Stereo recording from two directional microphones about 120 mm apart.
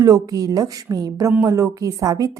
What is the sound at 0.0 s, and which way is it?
A woman's voice, 30° right (ahead or behind).